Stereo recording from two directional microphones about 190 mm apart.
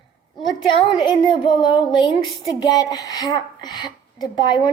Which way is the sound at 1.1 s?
25° left (ahead or behind).